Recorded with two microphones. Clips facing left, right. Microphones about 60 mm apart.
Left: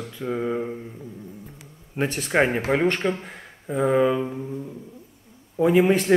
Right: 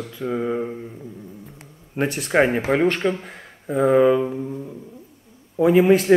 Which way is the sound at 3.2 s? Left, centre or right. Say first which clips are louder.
Right 3 dB; centre.